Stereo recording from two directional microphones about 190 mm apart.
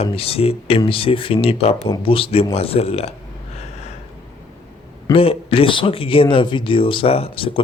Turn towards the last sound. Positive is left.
turn(degrees=30)  # may be behind; listen again after turning